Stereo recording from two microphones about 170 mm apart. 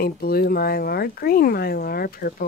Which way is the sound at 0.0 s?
60° left (ahead or behind).